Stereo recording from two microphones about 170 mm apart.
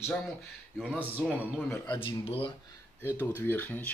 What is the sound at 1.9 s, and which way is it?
Speech, 30° left (ahead or behind).